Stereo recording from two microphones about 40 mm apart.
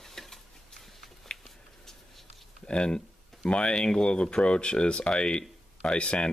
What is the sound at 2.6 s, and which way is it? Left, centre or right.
Speech, left.